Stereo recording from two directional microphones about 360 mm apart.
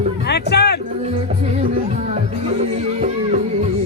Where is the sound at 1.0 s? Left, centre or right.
Centre.